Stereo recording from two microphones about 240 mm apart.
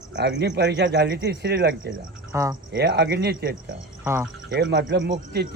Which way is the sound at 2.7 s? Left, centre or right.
Right.